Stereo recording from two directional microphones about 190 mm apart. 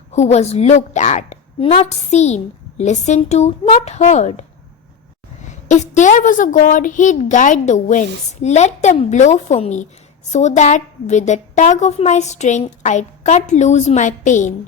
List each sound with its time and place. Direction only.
0.1 s a woman's voice: 35° left (ahead or behind)
5.6 s a woman's voice: 40° left (ahead or behind)